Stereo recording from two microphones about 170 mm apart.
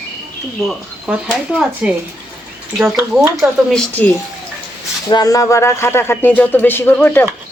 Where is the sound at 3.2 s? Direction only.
5° right (ahead or behind).